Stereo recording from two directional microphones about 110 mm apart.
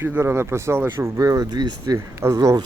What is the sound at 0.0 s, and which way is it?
Speech, 20° right (ahead or behind).